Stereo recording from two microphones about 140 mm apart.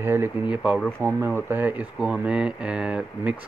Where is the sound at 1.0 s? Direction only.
15° right (ahead or behind).